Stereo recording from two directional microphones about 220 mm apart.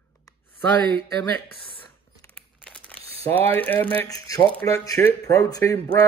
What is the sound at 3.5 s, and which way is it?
Speech, 10° left (ahead or behind).